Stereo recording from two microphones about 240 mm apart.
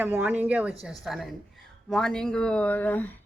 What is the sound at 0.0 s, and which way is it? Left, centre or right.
A woman's voice, centre.